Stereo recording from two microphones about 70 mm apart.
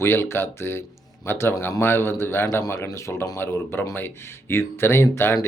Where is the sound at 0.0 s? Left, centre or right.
Left.